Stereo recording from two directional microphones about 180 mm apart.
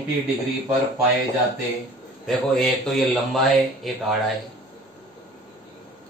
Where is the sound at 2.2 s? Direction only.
Centre (ahead or behind).